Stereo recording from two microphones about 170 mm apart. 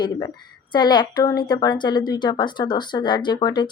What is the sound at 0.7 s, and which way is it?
Speech, 25° left (ahead or behind).